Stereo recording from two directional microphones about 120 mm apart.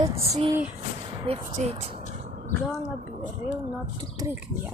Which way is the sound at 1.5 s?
65° right (ahead or behind).